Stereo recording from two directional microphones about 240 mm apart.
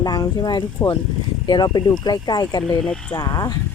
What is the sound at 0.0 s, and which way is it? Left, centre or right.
Speech, centre.